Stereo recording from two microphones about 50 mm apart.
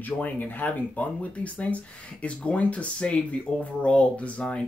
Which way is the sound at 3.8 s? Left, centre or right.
Left.